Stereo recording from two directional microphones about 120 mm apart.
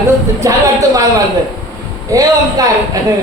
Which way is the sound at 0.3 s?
25° right (ahead or behind).